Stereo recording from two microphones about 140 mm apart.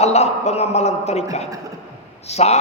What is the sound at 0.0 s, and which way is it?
A man's voice, 50° left (ahead or behind).